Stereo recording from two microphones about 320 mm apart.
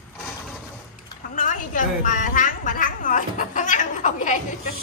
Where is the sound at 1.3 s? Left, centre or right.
Left.